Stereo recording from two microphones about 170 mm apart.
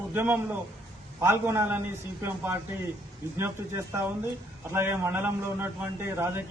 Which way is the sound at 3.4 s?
15° right (ahead or behind).